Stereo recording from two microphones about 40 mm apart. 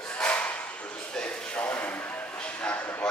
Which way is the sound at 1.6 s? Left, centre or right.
Left.